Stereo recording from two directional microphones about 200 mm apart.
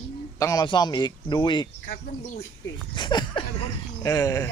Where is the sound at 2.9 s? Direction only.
20° left (ahead or behind).